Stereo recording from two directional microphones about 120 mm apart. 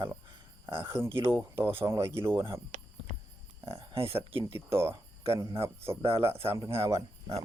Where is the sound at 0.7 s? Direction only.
45° right (ahead or behind).